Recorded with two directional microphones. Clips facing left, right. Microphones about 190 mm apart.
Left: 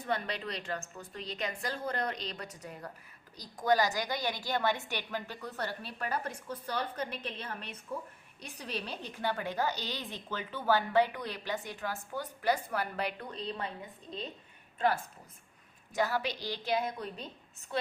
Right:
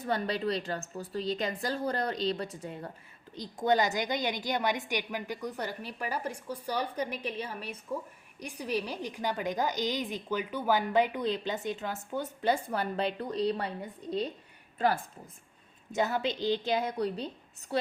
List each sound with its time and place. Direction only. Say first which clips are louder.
0.1 s a woman's voice: right 5 dB; 30° right (ahead or behind)
15.9 s a woman's voice: right 2 dB; 20° right (ahead or behind)
17.0 s a woman's voice: right 9 dB; 35° right (ahead or behind)